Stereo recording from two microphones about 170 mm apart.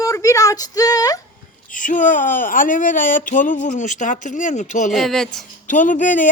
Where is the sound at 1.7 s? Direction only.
50° left (ahead or behind).